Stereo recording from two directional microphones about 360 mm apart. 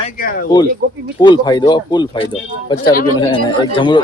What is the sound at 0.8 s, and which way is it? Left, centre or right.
Speech, right.